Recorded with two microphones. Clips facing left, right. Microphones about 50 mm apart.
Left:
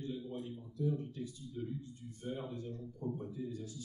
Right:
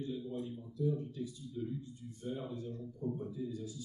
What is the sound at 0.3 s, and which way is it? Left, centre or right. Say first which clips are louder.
A man's voice: right 2 dB; left.